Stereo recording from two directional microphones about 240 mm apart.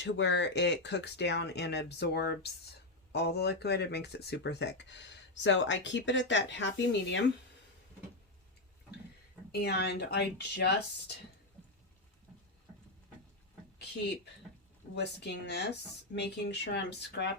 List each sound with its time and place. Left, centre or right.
0.0 s speech: left
9.5 s speech: left
14.9 s speech: left